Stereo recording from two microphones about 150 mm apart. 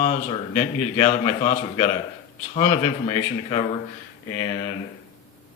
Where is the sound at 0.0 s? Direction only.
55° left (ahead or behind).